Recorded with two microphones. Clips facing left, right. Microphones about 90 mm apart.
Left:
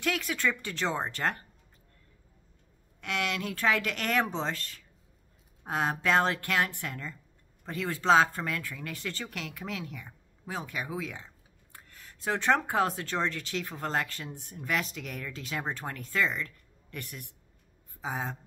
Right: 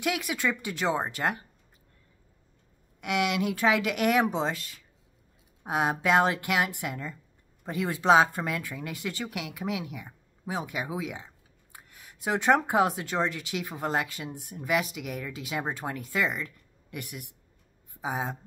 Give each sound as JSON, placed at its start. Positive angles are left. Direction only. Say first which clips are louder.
{"t": 0.0, "sound": "speech", "louder": "right 1 dB", "side_deg": -15}
{"t": 3.0, "sound": "speech", "louder": "right 5 dB", "side_deg": -15}